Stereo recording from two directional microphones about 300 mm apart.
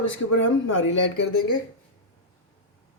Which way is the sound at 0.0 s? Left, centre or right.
Left.